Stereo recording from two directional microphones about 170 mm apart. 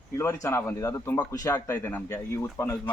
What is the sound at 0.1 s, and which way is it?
A man's voice, 15° left (ahead or behind).